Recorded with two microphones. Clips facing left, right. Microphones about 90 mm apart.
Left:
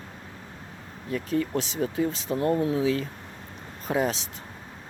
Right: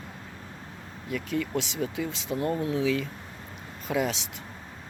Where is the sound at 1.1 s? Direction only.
35° left (ahead or behind).